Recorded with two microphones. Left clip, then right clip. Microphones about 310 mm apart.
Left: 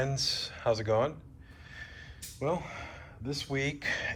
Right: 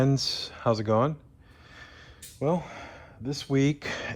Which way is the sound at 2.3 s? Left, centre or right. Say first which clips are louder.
Right 4 dB; right.